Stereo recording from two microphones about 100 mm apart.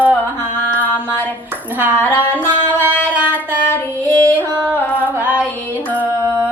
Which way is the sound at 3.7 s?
25° left (ahead or behind).